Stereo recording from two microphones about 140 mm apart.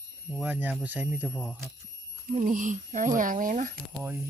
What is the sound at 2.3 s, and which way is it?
Speech, 65° right (ahead or behind).